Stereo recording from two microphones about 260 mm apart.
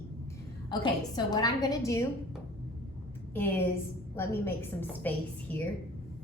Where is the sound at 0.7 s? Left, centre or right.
Centre.